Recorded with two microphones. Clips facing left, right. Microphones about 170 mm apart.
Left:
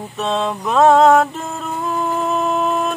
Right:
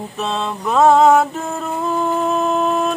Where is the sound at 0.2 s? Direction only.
Centre (ahead or behind).